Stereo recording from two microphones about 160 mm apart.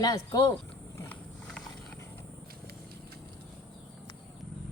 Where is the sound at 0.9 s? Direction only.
10° left (ahead or behind).